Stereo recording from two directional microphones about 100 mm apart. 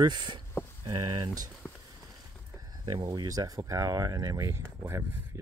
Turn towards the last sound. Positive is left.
turn(degrees=-30)  # may be behind; listen again after turning